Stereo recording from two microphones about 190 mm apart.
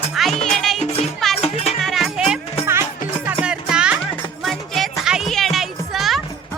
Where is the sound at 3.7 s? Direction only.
5° right (ahead or behind).